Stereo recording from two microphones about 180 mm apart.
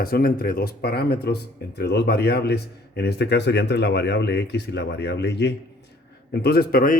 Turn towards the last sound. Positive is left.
turn(degrees=50)  # may be behind; listen again after turning